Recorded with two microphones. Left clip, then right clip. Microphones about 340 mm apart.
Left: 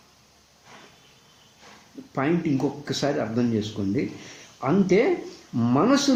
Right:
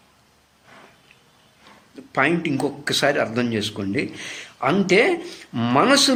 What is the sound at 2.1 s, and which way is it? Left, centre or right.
Speech, right.